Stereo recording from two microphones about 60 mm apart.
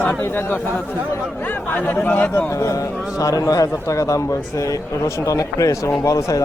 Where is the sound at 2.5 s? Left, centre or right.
Left.